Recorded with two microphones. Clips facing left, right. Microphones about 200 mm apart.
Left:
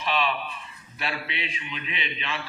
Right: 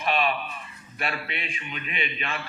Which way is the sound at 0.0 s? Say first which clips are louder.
Right 1 dB; 50° right (ahead or behind).